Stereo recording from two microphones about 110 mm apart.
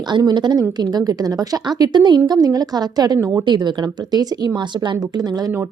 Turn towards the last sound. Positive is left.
turn(degrees=-35)  # may be behind; listen again after turning